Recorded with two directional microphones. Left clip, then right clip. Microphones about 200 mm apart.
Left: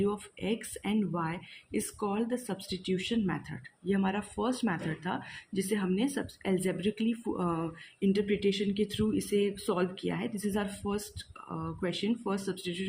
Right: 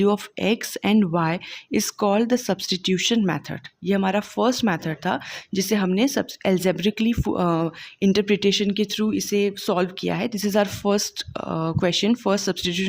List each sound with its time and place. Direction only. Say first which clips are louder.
0.0 s speech: right 12 dB; 55° right (ahead or behind)